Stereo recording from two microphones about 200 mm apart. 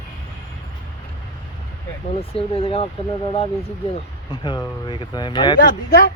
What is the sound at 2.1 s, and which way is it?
Speech, 30° left (ahead or behind).